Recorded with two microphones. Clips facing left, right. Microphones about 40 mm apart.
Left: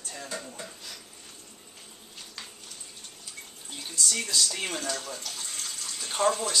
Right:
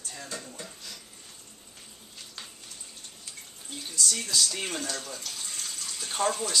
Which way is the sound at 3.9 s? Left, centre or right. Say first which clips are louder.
Even; centre.